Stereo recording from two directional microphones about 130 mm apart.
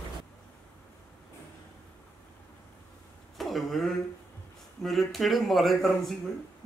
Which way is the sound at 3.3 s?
Centre (ahead or behind).